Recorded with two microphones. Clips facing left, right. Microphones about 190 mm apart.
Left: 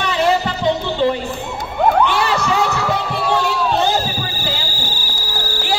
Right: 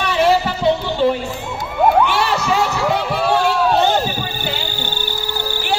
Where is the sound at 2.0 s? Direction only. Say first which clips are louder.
Left 1 dB; 10° right (ahead or behind).